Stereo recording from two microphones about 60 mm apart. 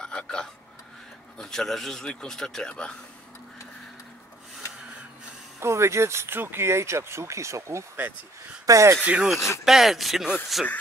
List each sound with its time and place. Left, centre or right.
0.0 s a sound: centre
1.4 s speech: centre
5.6 s speech: right
9.0 s speech: right
9.7 s speech: centre